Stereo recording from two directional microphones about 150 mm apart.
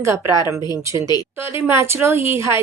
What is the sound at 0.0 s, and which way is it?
A woman's voice, 20° right (ahead or behind).